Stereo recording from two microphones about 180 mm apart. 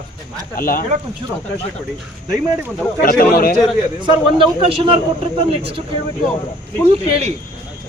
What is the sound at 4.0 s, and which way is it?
A man's voice, 25° right (ahead or behind).